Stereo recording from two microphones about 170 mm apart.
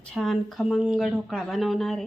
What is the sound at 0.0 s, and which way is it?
Speech, centre (ahead or behind).